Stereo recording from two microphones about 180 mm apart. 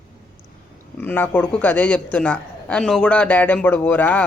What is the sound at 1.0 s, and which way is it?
A man's voice, 10° left (ahead or behind).